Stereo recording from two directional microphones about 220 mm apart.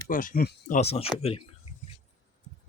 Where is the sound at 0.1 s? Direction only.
40° left (ahead or behind).